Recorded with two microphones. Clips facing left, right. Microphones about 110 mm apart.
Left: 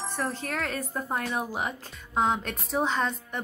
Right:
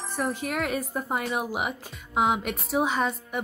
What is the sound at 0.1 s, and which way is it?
Speech, 10° right (ahead or behind).